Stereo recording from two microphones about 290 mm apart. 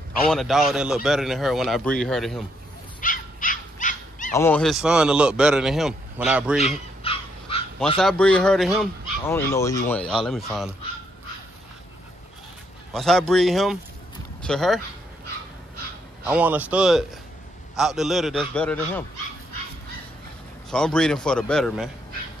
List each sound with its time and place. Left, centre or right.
0.3 s a man's voice: centre
3.0 s dog: left
4.3 s a man's voice: centre
6.6 s dog: centre
8.0 s a man's voice: centre
12.9 s a man's voice: centre
16.3 s a man's voice: centre
20.7 s a man's voice: centre